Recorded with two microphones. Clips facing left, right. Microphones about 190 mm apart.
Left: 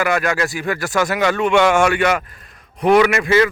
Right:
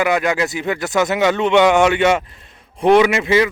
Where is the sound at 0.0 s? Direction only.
15° right (ahead or behind).